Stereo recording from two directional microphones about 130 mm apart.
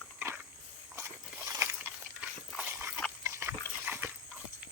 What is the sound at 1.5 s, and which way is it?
Biting, 20° right (ahead or behind).